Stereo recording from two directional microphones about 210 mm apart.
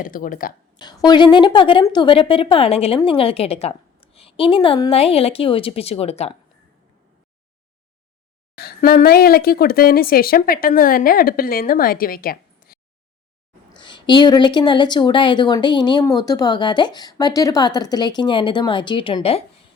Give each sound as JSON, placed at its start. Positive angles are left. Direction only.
{"t": 0.0, "sound": "speech", "side_deg": 40}
{"t": 0.8, "sound": "a woman's voice", "side_deg": 20}
{"t": 8.5, "sound": "speech", "side_deg": 45}
{"t": 13.7, "sound": "a woman's voice", "side_deg": 20}